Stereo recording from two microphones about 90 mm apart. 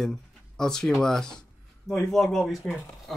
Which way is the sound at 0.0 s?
5° left (ahead or behind).